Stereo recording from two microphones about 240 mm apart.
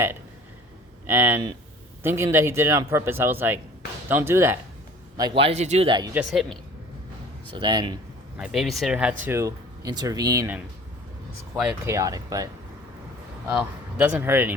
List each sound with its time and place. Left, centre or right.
1.0 s a man's voice: centre
6.1 s speech: centre
7.5 s a man's voice: centre
8.4 s speech: centre
11.6 s speech: centre
13.9 s speech: centre